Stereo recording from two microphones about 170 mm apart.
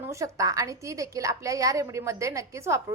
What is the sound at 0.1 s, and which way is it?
A woman's voice, 20° right (ahead or behind).